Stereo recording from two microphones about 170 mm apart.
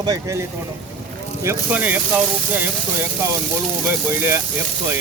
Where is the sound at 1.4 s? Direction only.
10° right (ahead or behind).